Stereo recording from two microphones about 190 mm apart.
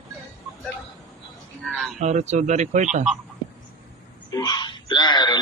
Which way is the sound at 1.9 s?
35° right (ahead or behind).